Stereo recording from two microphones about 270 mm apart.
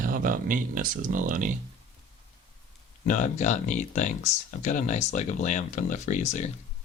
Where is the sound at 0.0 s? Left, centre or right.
Right.